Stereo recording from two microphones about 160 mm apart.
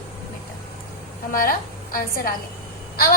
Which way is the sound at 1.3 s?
60° left (ahead or behind).